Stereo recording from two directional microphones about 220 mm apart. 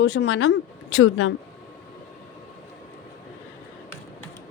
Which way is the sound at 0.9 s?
80° left.